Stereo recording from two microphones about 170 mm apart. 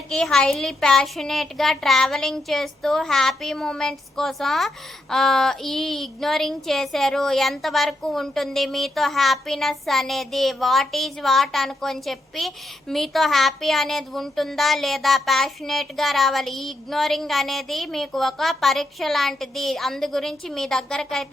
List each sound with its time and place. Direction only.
0.1 s speech: 5° left (ahead or behind)